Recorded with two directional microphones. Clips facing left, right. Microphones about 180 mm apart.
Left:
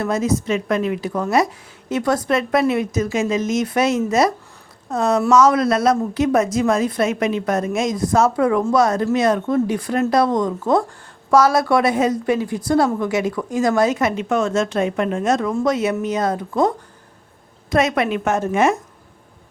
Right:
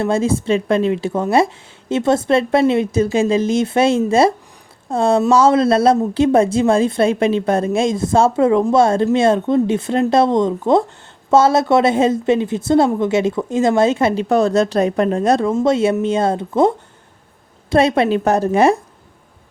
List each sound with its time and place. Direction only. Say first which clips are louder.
0.0 s a woman's voice: right 3 dB; 30° right (ahead or behind)